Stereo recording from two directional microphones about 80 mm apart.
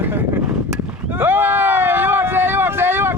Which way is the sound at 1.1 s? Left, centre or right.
Right.